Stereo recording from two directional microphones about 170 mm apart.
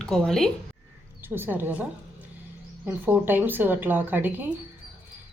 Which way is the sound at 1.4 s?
10° right (ahead or behind).